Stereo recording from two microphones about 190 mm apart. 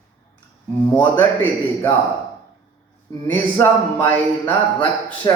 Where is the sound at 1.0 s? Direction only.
10° left (ahead or behind).